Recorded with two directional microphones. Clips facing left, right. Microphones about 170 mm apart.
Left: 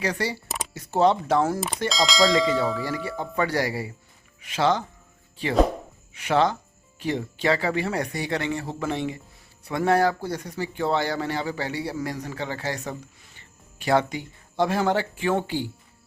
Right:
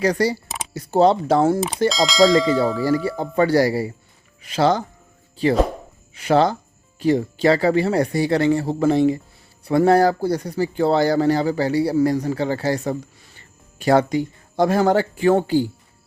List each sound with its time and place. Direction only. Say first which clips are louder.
0.0 s speech: right 8 dB; 40° right (ahead or behind)
1.9 s speech: right 5 dB; centre (ahead or behind)
2.8 s speech: right 9 dB; 35° right (ahead or behind)
6.1 s speech: right 5 dB; 35° right (ahead or behind)